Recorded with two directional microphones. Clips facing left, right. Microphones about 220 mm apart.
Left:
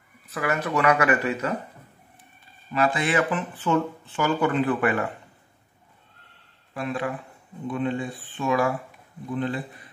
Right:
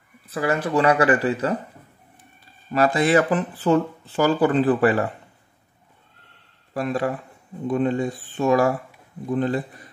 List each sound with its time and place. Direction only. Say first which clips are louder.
0.3 s speech: right 4 dB; 30° right (ahead or behind)
2.7 s speech: right 5 dB; 40° right (ahead or behind)
6.7 s speech: right 5 dB; 40° right (ahead or behind)